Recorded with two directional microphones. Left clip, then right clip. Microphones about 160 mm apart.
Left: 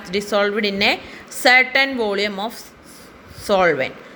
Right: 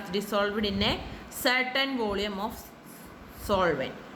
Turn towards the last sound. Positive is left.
turn(degrees=35)  # may be behind; listen again after turning